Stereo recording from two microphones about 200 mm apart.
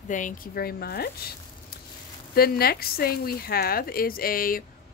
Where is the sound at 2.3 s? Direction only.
50° left (ahead or behind).